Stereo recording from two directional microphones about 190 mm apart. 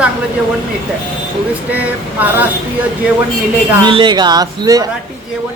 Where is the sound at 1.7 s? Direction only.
10° right (ahead or behind).